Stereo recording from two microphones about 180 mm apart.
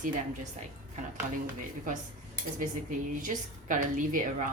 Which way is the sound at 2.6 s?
45° right (ahead or behind).